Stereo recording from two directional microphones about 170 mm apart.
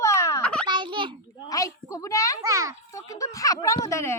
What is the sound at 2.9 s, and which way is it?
Speech, 20° left (ahead or behind).